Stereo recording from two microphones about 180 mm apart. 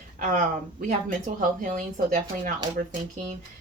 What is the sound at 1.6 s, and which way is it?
Speech, 45° right (ahead or behind).